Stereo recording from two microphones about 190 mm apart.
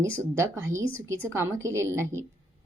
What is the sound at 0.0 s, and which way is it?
Speech, 15° right (ahead or behind).